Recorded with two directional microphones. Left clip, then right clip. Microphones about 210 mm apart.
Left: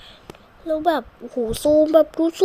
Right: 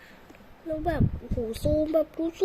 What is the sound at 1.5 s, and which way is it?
Speech, 15° left (ahead or behind).